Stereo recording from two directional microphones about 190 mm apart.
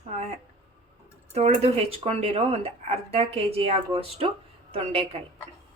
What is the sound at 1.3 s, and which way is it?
A woman's voice, 30° right (ahead or behind).